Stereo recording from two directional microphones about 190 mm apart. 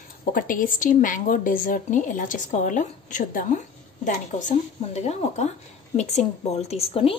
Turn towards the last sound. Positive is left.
turn(degrees=30)  # may be behind; listen again after turning